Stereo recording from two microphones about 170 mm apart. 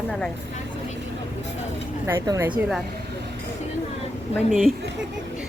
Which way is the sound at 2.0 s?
15° right (ahead or behind).